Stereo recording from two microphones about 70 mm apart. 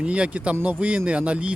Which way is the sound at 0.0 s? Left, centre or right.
Centre.